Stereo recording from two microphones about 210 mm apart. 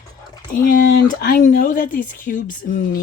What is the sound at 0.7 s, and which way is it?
A woman's voice, 40° left (ahead or behind).